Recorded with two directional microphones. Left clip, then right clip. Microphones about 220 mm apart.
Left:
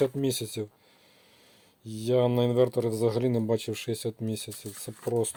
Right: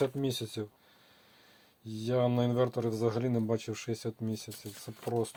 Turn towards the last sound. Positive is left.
turn(degrees=40)  # may be behind; listen again after turning